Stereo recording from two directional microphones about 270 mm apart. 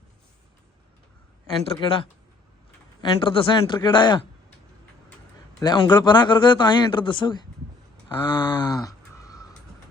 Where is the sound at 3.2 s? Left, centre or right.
Centre.